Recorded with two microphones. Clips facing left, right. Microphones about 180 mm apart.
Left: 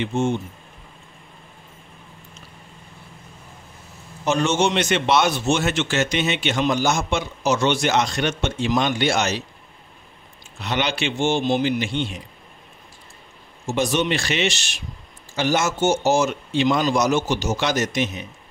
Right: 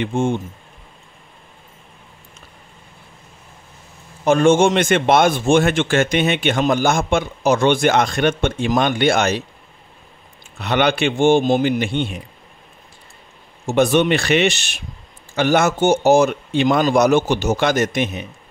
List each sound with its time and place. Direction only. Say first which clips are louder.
0.0 s a man's voice: right 2 dB; 50° right (ahead or behind)
4.2 s a man's voice: right 7 dB; 50° right (ahead or behind)
10.6 s a man's voice: right 7 dB; 55° right (ahead or behind)
13.7 s speech: right 6 dB; 60° right (ahead or behind)